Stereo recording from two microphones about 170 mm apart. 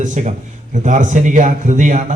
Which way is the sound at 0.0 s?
45° right (ahead or behind).